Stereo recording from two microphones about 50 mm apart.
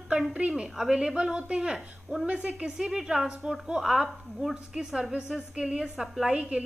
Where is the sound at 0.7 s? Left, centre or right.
Centre.